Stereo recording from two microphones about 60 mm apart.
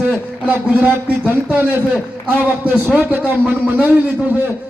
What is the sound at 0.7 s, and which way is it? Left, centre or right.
A man's voice, right.